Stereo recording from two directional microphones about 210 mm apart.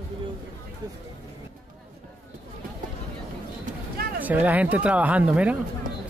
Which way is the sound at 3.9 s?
45° right (ahead or behind).